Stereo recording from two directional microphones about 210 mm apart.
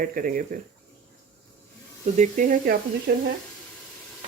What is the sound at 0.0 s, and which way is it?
Speech, 40° right (ahead or behind).